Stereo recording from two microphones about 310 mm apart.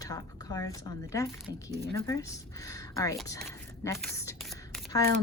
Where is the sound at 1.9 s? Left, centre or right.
Centre.